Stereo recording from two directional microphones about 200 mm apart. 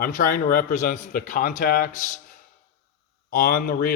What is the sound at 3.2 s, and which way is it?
Speech, 45° left (ahead or behind).